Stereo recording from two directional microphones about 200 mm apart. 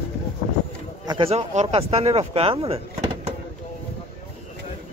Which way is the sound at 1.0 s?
25° right (ahead or behind).